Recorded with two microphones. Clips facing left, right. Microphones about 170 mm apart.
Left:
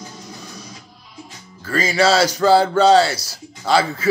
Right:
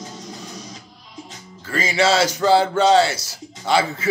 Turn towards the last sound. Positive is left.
turn(degrees=-20)  # may be behind; listen again after turning